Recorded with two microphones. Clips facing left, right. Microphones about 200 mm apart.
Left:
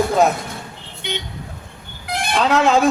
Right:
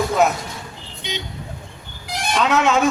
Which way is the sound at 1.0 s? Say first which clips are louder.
Left 2 dB; 55° left (ahead or behind).